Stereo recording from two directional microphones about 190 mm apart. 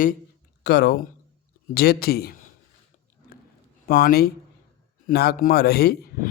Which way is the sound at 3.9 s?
50° left (ahead or behind).